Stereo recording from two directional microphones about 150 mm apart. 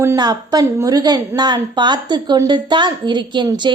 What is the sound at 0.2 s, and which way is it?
A woman's voice, 25° right (ahead or behind).